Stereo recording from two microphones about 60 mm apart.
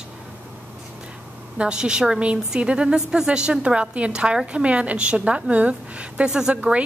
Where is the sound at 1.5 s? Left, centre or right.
Centre.